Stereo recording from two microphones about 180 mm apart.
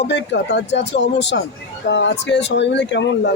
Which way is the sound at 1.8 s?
85° left.